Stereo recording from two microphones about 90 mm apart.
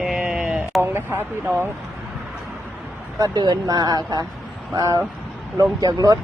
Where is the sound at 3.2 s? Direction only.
45° right (ahead or behind).